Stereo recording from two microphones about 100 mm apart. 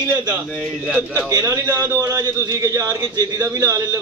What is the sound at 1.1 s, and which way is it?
Speech, 35° right (ahead or behind).